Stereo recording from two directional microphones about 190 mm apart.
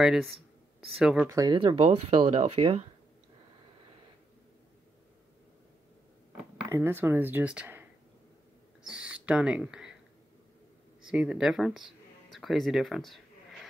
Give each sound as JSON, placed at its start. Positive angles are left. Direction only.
{"t": 0.0, "sound": "speech", "side_deg": 0}
{"t": 1.3, "sound": "speech", "side_deg": -20}
{"t": 6.7, "sound": "speech", "side_deg": -10}
{"t": 8.9, "sound": "speech", "side_deg": -5}
{"t": 11.1, "sound": "speech", "side_deg": -5}